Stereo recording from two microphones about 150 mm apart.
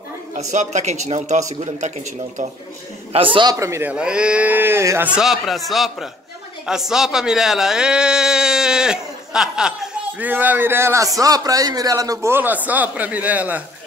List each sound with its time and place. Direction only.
0.4 s a man's voice: 50° right (ahead or behind)
3.1 s a man's voice: 35° right (ahead or behind)
3.5 s speech: 20° right (ahead or behind)
3.9 s a man's voice: 5° right (ahead or behind)